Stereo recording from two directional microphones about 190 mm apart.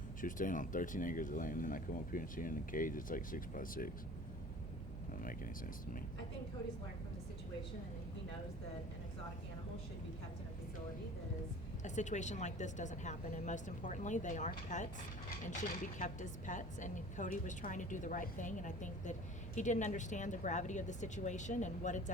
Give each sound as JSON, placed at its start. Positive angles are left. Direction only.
{"t": 0.2, "sound": "speech", "side_deg": 45}
{"t": 11.8, "sound": "speech", "side_deg": 40}